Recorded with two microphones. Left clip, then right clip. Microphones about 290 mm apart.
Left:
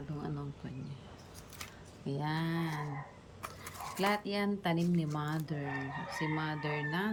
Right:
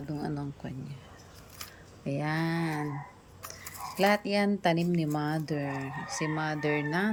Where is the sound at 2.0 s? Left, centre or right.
Centre.